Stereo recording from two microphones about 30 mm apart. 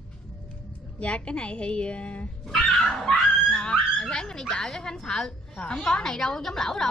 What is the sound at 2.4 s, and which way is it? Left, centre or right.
Dog, centre.